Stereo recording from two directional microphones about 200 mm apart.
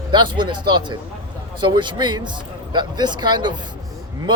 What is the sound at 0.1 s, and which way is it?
Speech, 20° right (ahead or behind).